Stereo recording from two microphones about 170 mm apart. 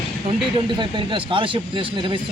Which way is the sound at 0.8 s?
30° right (ahead or behind).